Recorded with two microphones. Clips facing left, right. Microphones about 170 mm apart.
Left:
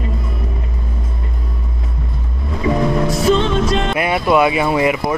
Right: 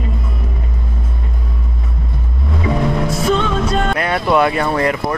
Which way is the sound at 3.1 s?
35° left (ahead or behind).